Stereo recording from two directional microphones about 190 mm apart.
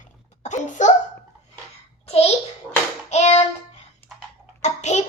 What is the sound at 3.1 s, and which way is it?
Child singing, 35° left (ahead or behind).